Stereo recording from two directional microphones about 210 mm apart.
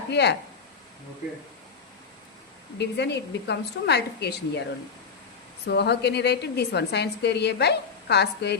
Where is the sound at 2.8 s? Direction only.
55° left (ahead or behind).